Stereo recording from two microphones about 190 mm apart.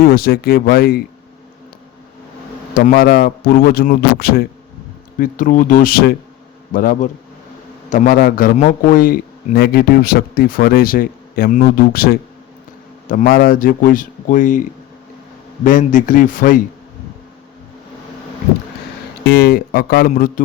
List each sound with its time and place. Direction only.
0.0 s a man's voice: 55° left (ahead or behind)
2.7 s a man's voice: 50° left (ahead or behind)
19.2 s a man's voice: 55° left (ahead or behind)